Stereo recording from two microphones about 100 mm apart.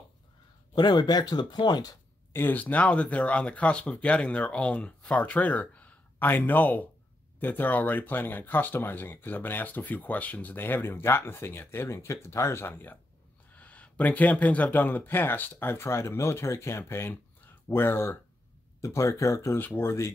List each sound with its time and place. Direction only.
0.7 s speech: 45° left (ahead or behind)
2.3 s speech: 20° left (ahead or behind)